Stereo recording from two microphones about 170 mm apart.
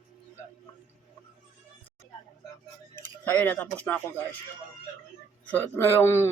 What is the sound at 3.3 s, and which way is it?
Speech, 10° left (ahead or behind).